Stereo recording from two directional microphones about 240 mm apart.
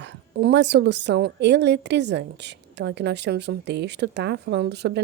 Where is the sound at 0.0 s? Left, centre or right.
Right.